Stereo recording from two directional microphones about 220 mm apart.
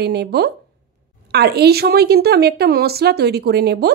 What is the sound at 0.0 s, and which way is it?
A woman's voice, 50° right (ahead or behind).